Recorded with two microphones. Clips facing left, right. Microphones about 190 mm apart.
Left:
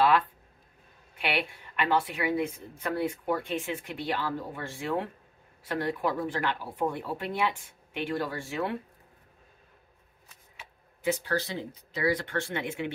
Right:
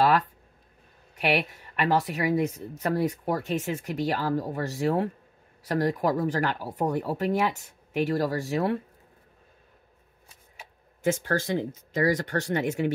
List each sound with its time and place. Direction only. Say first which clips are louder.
0.0 s a sound: right 1 dB; 40° right (ahead or behind)
1.1 s speech: right 5 dB; 45° right (ahead or behind)
11.0 s speech: right 3 dB; 50° right (ahead or behind)